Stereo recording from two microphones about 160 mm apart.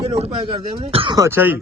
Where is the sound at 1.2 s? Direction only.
15° right (ahead or behind).